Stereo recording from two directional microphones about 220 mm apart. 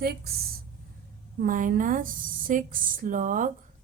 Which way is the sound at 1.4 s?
40° right (ahead or behind).